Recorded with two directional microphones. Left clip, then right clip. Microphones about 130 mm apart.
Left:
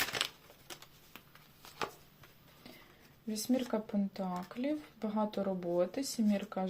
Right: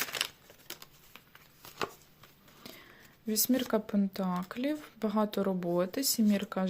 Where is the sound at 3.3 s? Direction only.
55° right (ahead or behind).